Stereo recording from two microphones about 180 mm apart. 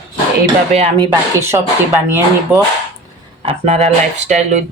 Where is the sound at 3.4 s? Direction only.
35° right (ahead or behind).